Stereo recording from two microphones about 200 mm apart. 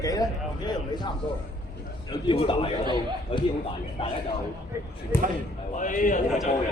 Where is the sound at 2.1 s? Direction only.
25° left (ahead or behind).